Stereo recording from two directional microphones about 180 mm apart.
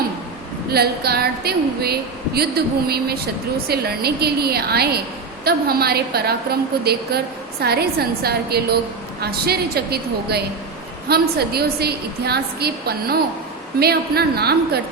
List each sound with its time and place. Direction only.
0.7 s a woman's voice: 60° right (ahead or behind)